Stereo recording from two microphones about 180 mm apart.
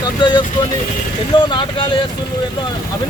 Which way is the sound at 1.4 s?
25° left (ahead or behind).